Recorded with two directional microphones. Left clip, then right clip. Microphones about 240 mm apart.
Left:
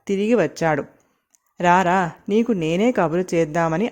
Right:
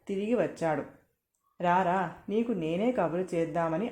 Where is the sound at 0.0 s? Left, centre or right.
Left.